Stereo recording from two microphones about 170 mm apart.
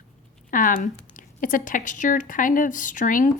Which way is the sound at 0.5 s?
55° left (ahead or behind).